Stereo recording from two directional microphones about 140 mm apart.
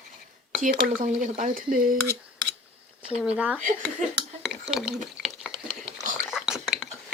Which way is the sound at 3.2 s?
10° right (ahead or behind).